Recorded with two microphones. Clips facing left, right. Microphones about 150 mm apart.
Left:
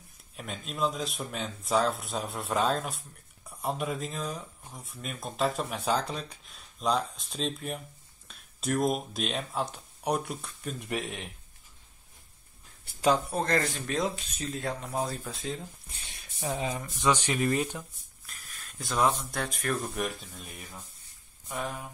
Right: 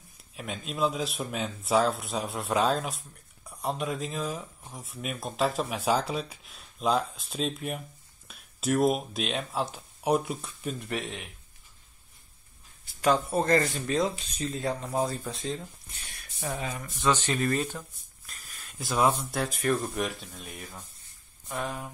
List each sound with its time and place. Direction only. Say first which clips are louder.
0.4 s speech: right 2 dB; centre (ahead or behind)
10.8 s speech: left 4 dB; 10° left (ahead or behind)
13.3 s speech: right 4 dB; 5° right (ahead or behind)
15.9 s speech: right 1 dB; 20° left (ahead or behind)
18.2 s speech: even; centre (ahead or behind)